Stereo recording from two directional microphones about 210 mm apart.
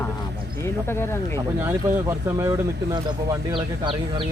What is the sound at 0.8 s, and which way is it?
Speech, 10° left (ahead or behind).